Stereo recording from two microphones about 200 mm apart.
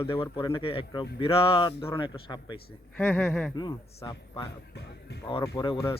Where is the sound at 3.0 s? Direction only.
5° left (ahead or behind).